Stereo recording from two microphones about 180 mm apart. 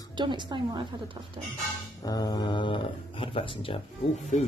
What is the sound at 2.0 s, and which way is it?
Speech, 20° left (ahead or behind).